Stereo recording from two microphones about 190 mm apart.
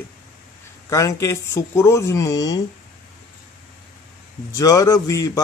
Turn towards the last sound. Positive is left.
turn(degrees=15)  # may be behind; listen again after turning